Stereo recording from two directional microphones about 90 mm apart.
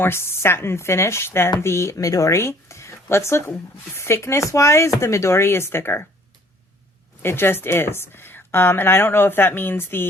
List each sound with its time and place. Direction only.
0.0 s speech: 25° left (ahead or behind)
7.2 s speech: 25° left (ahead or behind)